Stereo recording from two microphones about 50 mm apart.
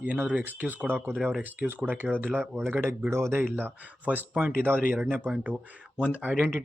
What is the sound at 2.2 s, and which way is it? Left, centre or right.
Speech, right.